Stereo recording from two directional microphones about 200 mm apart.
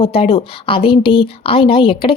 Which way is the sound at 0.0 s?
30° left (ahead or behind).